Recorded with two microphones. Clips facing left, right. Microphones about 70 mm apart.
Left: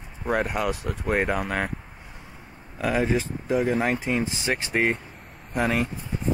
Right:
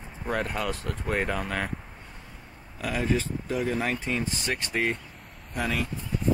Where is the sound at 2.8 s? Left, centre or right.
Left.